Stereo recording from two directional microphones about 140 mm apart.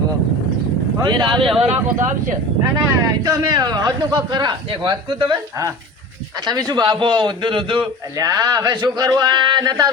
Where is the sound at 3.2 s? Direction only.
25° right (ahead or behind).